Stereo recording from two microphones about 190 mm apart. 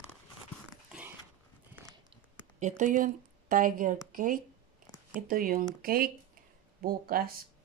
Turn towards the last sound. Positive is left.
turn(degrees=-50)  # may be behind; listen again after turning